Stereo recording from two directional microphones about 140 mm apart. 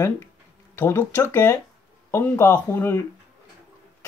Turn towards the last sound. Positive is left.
turn(degrees=20)  # may be behind; listen again after turning